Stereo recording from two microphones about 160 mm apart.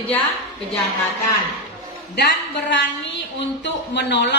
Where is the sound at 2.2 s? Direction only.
90° left.